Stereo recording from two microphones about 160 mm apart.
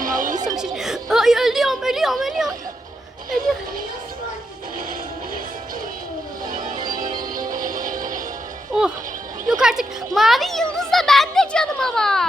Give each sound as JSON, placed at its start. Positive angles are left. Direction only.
{"t": 0.0, "sound": "music", "side_deg": -55}
{"t": 0.4, "sound": "music", "side_deg": -5}
{"t": 6.4, "sound": "music", "side_deg": -55}
{"t": 8.7, "sound": "a sound", "side_deg": -5}
{"t": 9.5, "sound": "a child's voice", "side_deg": -5}